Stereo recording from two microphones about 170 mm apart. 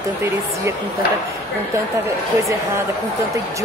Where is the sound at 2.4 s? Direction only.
15° right (ahead or behind).